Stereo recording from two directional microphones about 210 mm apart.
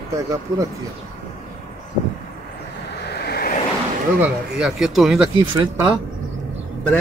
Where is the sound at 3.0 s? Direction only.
50° left (ahead or behind).